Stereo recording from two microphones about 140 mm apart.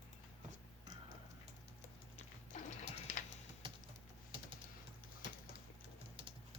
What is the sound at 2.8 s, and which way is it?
Printer, 60° left (ahead or behind).